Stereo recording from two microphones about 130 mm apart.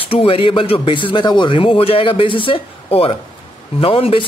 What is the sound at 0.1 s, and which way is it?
Speech, 45° left (ahead or behind).